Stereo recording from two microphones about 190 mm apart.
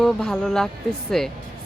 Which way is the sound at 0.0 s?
Centre (ahead or behind).